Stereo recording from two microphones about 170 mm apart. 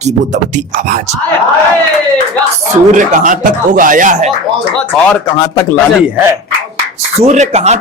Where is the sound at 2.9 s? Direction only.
50° right (ahead or behind).